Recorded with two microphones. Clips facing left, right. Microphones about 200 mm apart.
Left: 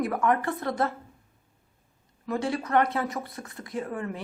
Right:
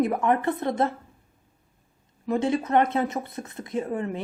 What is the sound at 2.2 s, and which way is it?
Speech, 20° right (ahead or behind).